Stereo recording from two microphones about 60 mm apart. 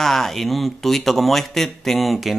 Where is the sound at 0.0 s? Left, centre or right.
Centre.